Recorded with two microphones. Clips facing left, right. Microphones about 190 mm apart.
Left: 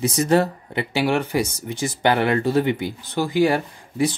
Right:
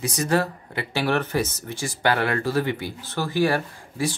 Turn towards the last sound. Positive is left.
turn(degrees=20)  # may be behind; listen again after turning